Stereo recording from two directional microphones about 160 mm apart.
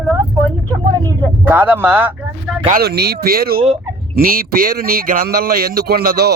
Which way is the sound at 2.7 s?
80° right.